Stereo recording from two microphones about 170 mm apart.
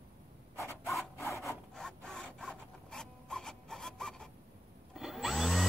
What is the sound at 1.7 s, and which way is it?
Rub, 5° left (ahead or behind).